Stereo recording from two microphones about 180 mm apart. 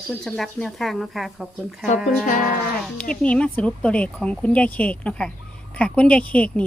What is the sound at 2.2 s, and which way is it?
Speech, 45° left (ahead or behind).